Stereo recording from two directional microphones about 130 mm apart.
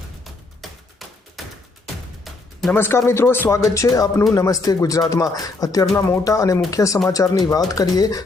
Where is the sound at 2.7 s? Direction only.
15° left (ahead or behind).